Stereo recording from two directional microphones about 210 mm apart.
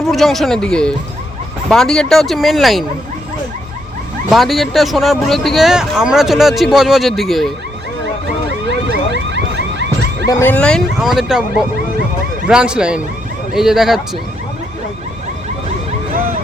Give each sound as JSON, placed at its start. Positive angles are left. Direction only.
{"t": 0.0, "sound": "speech", "side_deg": 0}
{"t": 4.3, "sound": "speech", "side_deg": 0}
{"t": 9.3, "sound": "car alarm", "side_deg": -55}
{"t": 10.2, "sound": "speech", "side_deg": 10}